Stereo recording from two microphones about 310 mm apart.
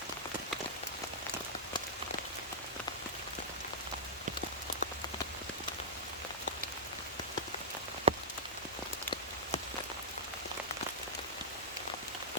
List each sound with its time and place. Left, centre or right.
8.1 s rain on surface: centre